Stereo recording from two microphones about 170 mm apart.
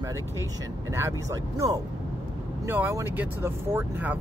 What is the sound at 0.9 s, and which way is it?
Speech, 15° right (ahead or behind).